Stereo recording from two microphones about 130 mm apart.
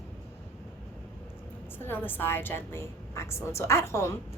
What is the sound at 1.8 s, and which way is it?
A woman's voice, 15° left (ahead or behind).